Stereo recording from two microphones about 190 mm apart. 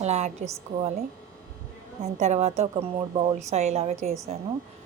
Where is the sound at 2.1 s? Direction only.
40° right (ahead or behind).